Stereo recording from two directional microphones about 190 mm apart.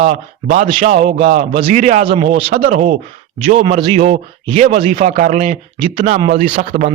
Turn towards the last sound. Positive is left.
turn(degrees=-40)  # may be behind; listen again after turning